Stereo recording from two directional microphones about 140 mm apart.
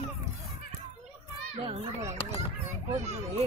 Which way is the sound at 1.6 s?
50° right (ahead or behind).